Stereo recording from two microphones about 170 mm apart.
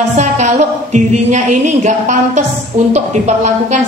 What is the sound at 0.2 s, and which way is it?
A woman's voice, 45° right (ahead or behind).